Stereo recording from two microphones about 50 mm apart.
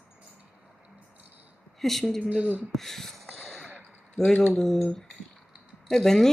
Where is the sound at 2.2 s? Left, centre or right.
Right.